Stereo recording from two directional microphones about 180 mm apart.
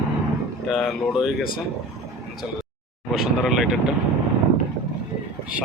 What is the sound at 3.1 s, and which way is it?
Speech, centre (ahead or behind).